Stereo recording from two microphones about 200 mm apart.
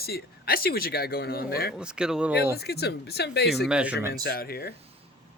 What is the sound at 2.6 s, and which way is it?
Speech, 55° left (ahead or behind).